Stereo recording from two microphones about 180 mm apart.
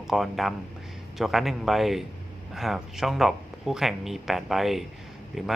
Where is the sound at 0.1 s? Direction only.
Centre (ahead or behind).